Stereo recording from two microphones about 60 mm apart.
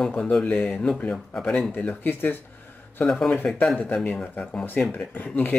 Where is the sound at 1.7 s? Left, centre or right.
Left.